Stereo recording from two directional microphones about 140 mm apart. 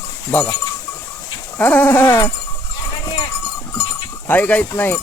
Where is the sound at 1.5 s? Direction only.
10° left (ahead or behind).